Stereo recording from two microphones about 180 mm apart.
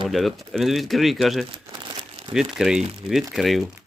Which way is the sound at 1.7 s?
25° right (ahead or behind).